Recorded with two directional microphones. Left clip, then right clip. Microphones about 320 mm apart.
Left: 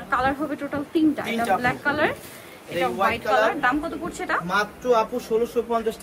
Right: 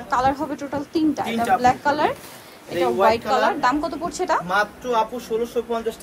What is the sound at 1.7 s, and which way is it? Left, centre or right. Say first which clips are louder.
Speech: right 3 dB; centre.